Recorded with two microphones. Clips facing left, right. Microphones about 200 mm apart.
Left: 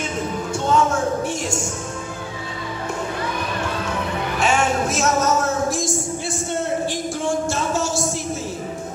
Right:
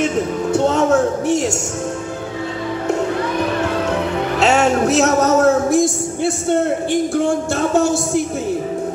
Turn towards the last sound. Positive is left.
turn(degrees=-60)  # may be behind; listen again after turning